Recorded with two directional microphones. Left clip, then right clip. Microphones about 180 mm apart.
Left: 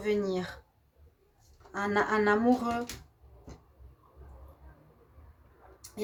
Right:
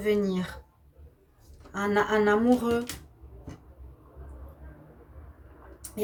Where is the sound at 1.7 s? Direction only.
50° left (ahead or behind).